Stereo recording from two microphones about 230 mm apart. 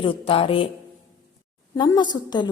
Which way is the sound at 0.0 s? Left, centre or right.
Left.